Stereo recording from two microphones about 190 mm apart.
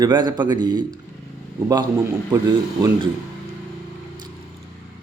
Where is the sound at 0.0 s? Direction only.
20° right (ahead or behind).